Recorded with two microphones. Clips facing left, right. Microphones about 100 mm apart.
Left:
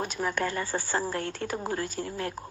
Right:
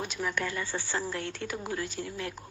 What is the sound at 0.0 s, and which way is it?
A woman's voice, 45° left (ahead or behind).